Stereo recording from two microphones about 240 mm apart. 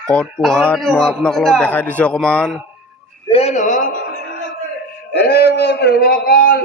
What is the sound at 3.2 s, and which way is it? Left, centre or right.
Speech, left.